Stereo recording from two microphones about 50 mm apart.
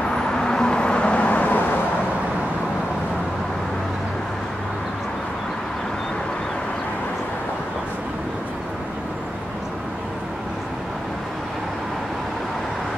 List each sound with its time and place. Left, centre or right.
0.1 s vehicle: centre; by 1.6 s left